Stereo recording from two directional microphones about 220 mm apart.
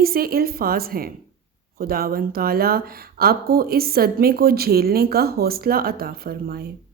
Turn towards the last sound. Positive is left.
turn(degrees=-45)  # may be behind; listen again after turning